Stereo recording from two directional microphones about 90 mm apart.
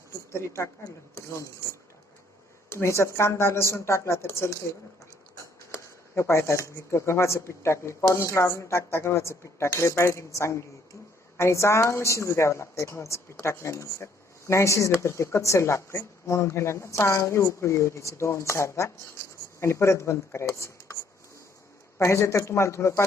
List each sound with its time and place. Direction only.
0.3 s a woman's voice: 30° left (ahead or behind)
2.6 s a woman's voice: 30° left (ahead or behind)
5.7 s a woman's voice: 30° left (ahead or behind)